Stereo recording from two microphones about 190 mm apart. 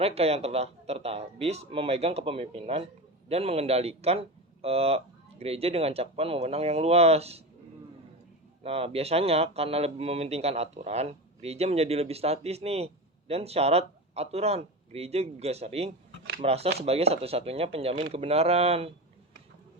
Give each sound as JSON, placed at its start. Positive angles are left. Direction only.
{"t": 0.0, "sound": "speech", "side_deg": -30}
{"t": 8.6, "sound": "speech", "side_deg": -30}